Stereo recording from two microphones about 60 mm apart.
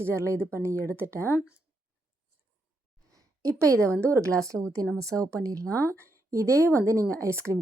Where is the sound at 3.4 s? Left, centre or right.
Right.